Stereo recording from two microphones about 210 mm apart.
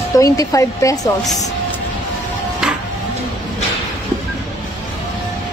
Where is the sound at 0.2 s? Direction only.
15° left (ahead or behind).